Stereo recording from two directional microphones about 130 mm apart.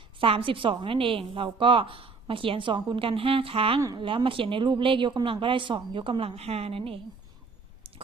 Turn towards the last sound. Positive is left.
turn(degrees=-50)  # may be behind; listen again after turning